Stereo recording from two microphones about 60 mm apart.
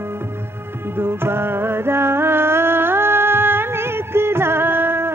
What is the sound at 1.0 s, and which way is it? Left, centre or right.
Music, right.